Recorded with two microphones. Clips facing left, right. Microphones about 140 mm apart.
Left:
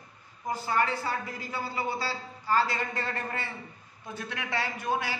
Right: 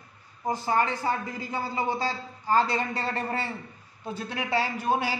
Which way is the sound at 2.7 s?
35° right (ahead or behind).